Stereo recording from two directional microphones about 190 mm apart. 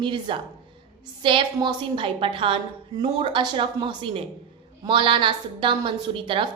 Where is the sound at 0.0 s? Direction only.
25° right (ahead or behind).